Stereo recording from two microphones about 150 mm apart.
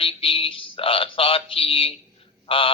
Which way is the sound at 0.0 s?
40° left (ahead or behind).